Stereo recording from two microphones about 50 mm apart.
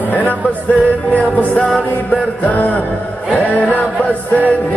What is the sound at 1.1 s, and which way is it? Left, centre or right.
Music, left.